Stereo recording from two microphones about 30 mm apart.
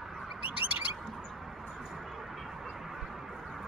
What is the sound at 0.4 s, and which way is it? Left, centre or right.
Bird, right.